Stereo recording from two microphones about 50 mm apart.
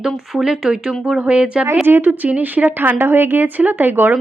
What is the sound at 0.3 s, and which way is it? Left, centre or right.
Speech, centre.